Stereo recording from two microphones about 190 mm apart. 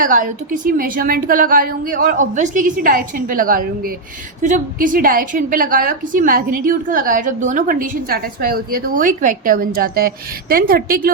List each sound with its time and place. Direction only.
0.0 s a woman's voice: 45° right (ahead or behind)